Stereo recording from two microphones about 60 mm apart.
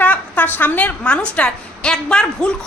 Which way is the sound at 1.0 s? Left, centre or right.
Centre.